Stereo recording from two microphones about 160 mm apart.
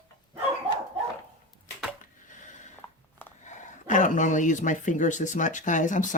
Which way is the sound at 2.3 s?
50° left (ahead or behind).